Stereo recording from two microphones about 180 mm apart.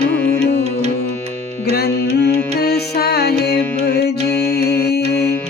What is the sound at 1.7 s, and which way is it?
Music, 60° left (ahead or behind).